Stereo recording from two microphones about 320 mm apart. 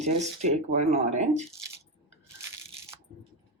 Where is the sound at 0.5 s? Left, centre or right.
Right.